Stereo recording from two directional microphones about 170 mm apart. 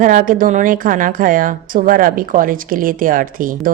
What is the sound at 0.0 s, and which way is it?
A woman's voice, 50° right (ahead or behind).